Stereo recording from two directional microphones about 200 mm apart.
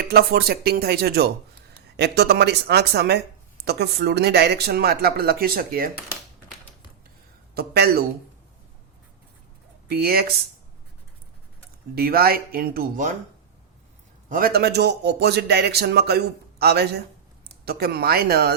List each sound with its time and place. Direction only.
0.1 s speech: 50° right (ahead or behind)
7.5 s speech: 50° right (ahead or behind)
9.9 s speech: 50° right (ahead or behind)
11.9 s speech: 50° right (ahead or behind)
14.3 s speech: 45° right (ahead or behind)